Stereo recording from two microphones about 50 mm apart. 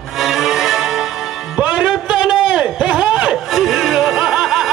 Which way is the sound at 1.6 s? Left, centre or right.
Right.